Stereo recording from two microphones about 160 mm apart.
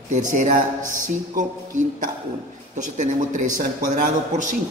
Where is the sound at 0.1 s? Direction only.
50° right (ahead or behind).